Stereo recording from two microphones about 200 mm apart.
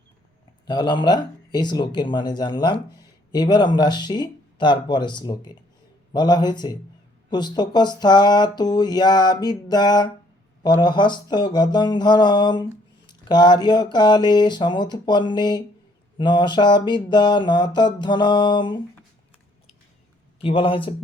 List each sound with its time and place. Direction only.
0.7 s speech: 20° left (ahead or behind)
20.4 s speech: 25° left (ahead or behind)